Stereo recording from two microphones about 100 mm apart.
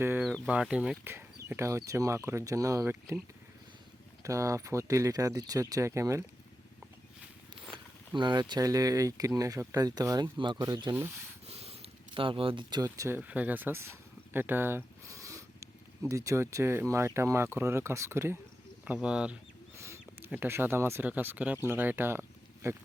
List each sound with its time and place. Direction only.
0.0 s a sound: 20° right (ahead or behind)
0.4 s speech: 10° right (ahead or behind)
1.0 s speech: 25° right (ahead or behind)
4.2 s speech: 30° right (ahead or behind)
8.1 s speech: 45° right (ahead or behind)
10.3 s speech: 50° right (ahead or behind)
11.4 s a sound: 90° right; by 12.8 s 55° right (ahead or behind)
12.8 s speech: 35° right (ahead or behind)
13.1 s speech: 15° right (ahead or behind)
19.0 s speech: 10° right (ahead or behind)
19.7 s a sound: 25° right (ahead or behind)
20.3 s speech: 20° right (ahead or behind)